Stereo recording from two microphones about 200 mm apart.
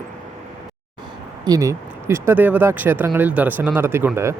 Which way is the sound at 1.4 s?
15° right (ahead or behind).